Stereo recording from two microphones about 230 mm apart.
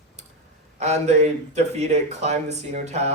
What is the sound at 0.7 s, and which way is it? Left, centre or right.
Speech, right.